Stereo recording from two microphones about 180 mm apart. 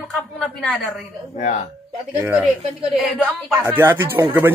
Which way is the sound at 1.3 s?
40° left (ahead or behind).